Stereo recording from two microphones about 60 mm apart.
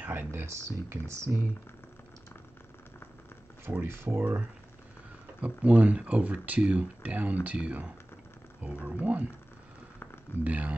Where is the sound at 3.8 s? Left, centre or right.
Right.